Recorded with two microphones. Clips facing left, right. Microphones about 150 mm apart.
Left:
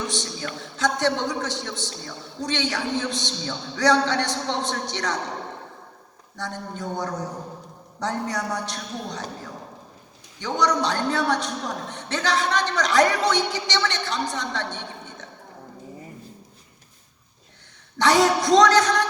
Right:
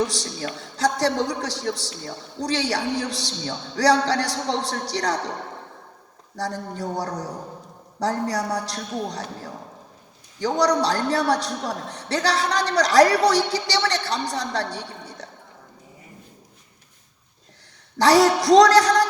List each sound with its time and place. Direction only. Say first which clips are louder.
0.1 s a man's voice: even; 40° right (ahead or behind)
6.3 s a man's voice: right 4 dB; 35° right (ahead or behind)
10.4 s a man's voice: right 3 dB; 40° right (ahead or behind)
17.9 s a man's voice: right 3 dB; 35° right (ahead or behind)